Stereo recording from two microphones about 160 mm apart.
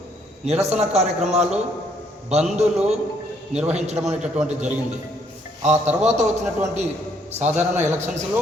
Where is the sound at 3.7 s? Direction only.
45° right (ahead or behind).